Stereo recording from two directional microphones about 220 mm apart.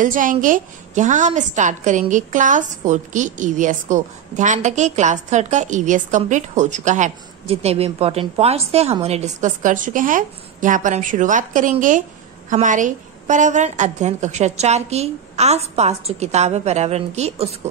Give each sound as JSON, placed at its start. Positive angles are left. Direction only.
{"t": 0.0, "sound": "a woman's voice", "side_deg": -35}